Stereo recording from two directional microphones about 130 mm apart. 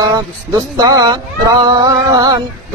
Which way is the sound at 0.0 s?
25° right (ahead or behind).